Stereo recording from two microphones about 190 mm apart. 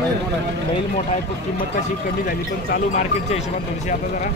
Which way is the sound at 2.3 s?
50° left (ahead or behind).